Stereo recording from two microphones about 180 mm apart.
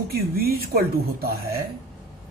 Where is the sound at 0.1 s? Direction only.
60° right (ahead or behind).